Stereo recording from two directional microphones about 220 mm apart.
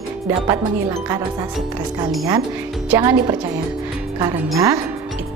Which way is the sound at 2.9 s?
15° right (ahead or behind).